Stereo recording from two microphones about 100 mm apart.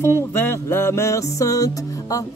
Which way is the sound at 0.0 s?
25° left (ahead or behind).